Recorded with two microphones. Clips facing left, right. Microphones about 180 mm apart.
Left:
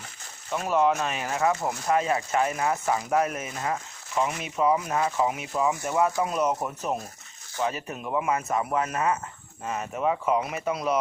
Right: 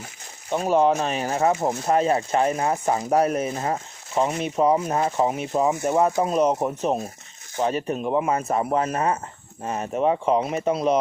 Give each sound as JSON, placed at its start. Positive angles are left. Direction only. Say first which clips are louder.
{"t": 0.5, "sound": "speech", "louder": "right 4 dB", "side_deg": -30}
{"t": 6.1, "sound": "speech", "louder": "right 5 dB", "side_deg": -25}